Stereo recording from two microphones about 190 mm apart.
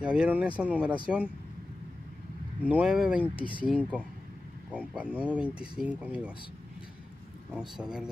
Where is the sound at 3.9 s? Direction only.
5° right (ahead or behind).